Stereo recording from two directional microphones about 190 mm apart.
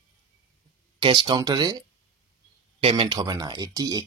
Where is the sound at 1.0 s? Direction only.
25° right (ahead or behind).